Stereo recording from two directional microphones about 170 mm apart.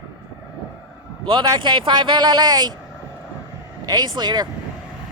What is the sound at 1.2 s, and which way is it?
Speech, 25° right (ahead or behind).